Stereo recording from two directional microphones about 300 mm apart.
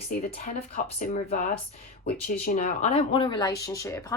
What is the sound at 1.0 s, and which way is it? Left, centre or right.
Speech, left.